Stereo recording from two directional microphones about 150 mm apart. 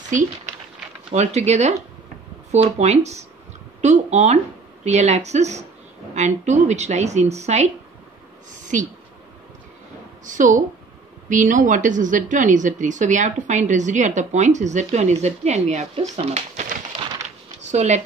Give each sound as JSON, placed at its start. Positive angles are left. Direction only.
{"t": 1.1, "sound": "speech", "side_deg": -50}
{"t": 8.7, "sound": "a woman's voice", "side_deg": -55}
{"t": 10.2, "sound": "a woman's voice", "side_deg": -60}